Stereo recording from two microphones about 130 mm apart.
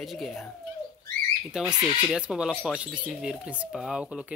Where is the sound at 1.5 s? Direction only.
5° right (ahead or behind).